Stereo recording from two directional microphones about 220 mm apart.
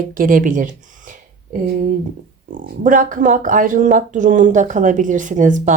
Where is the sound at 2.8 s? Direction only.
35° right (ahead or behind).